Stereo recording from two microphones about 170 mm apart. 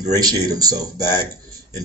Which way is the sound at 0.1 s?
20° right (ahead or behind).